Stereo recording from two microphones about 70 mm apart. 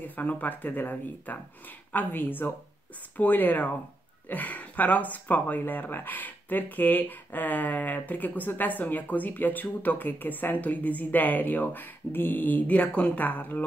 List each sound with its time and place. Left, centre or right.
0.0 s speech: left